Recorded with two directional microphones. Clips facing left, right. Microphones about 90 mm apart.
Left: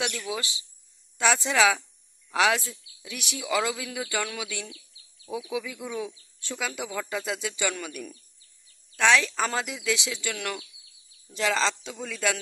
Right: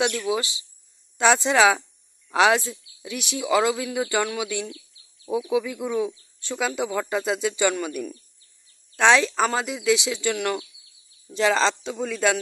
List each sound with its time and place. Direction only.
0.0 s a man's voice: 30° right (ahead or behind)